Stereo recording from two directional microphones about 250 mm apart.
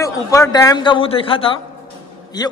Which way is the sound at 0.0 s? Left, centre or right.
Centre.